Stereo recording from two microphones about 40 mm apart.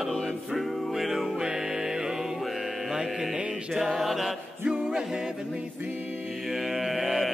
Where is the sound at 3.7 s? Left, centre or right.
Centre.